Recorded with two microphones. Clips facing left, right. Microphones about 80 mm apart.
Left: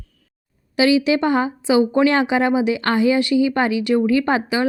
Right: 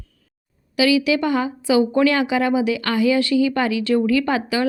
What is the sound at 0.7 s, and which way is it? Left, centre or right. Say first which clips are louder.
Speech: left 1 dB; left.